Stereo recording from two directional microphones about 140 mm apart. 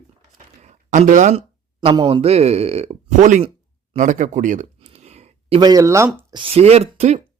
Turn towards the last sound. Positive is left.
turn(degrees=-50)  # may be behind; listen again after turning